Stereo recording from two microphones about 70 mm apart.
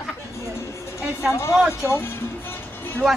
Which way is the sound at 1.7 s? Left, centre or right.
Left.